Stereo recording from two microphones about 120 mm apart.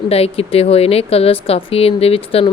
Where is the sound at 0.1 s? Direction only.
55° left (ahead or behind).